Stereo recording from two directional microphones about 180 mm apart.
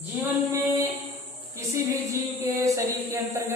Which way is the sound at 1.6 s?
15° right (ahead or behind).